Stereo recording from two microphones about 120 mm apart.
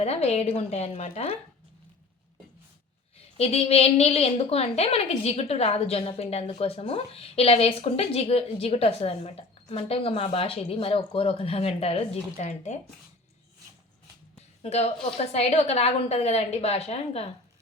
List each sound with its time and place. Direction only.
0.0 s a woman's voice: 60° left (ahead or behind)
3.2 s a woman's voice: 55° left (ahead or behind)
14.6 s a woman's voice: 60° left (ahead or behind)